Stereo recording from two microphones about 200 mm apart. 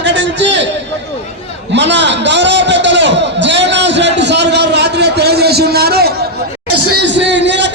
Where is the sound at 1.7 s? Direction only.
60° right (ahead or behind).